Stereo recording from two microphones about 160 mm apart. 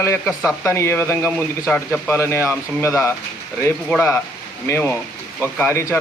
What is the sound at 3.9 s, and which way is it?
A man's voice, 5° left (ahead or behind).